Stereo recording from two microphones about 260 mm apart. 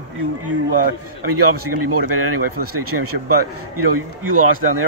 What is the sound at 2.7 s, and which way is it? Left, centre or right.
Speech, right.